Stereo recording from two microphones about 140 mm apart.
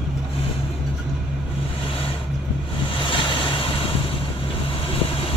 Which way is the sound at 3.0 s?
35° left (ahead or behind).